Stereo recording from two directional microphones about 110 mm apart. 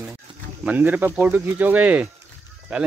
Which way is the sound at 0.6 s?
15° right (ahead or behind).